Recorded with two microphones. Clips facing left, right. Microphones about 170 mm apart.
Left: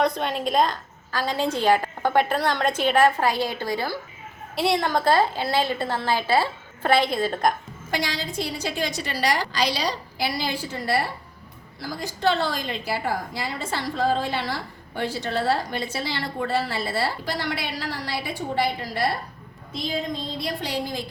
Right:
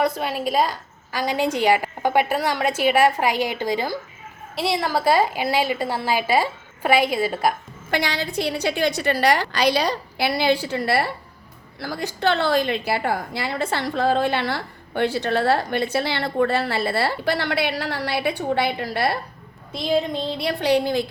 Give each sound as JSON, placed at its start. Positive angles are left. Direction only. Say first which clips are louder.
{"t": 0.0, "sound": "a woman's voice", "louder": "right 1 dB", "side_deg": -5}
{"t": 4.5, "sound": "a woman's voice", "louder": "even", "side_deg": 0}
{"t": 7.9, "sound": "a woman's voice", "louder": "right 4 dB", "side_deg": -65}